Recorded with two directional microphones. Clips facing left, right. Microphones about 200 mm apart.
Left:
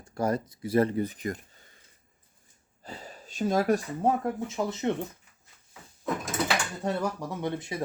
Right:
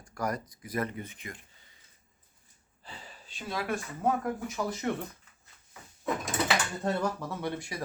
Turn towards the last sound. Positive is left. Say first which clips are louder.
# left 3 dB
turn(degrees=20)  # may be behind; listen again after turning